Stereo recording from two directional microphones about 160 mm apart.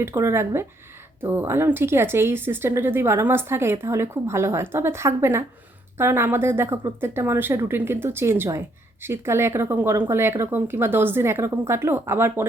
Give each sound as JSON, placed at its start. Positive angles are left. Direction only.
{"t": 0.0, "sound": "a woman's voice", "side_deg": -15}